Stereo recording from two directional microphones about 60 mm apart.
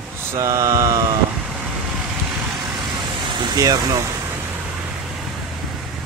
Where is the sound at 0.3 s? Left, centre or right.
Right.